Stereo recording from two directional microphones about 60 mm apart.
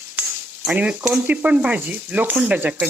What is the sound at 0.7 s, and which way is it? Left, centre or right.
Speech, right.